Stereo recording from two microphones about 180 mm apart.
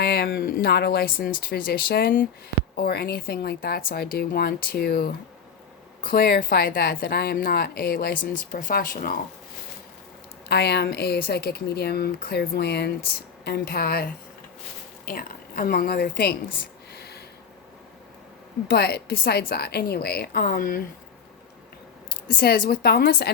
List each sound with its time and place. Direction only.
0.0 s a woman's voice: 55° left (ahead or behind)
10.5 s a woman's voice: 65° left (ahead or behind)
16.9 s a sound: 60° left (ahead or behind)
18.7 s a woman's voice: 65° left (ahead or behind)
22.4 s a woman's voice: 65° left (ahead or behind)